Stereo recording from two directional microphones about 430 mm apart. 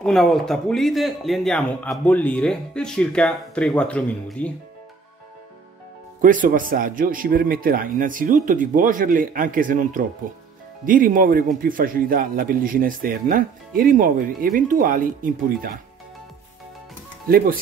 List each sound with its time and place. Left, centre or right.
0.0 s a man's voice: centre
6.2 s speech: centre